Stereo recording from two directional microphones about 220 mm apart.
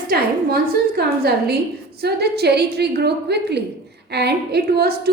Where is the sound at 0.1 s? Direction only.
45° right (ahead or behind).